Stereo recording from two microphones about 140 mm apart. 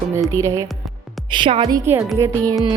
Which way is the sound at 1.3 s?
35° right (ahead or behind).